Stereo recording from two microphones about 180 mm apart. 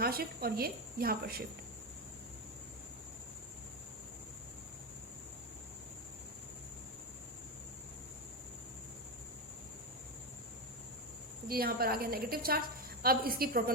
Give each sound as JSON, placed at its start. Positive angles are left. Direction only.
{"t": 0.0, "sound": "a woman's voice", "side_deg": -55}
{"t": 11.4, "sound": "a woman's voice", "side_deg": -55}